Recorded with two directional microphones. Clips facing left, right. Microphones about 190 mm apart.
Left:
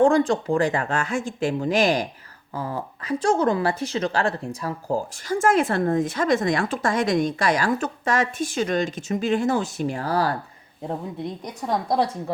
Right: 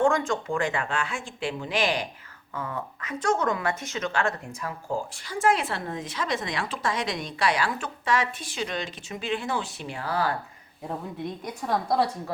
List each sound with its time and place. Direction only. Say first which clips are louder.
0.0 s speech: left 6 dB; 35° left (ahead or behind)
10.8 s speech: left 3 dB; 20° left (ahead or behind)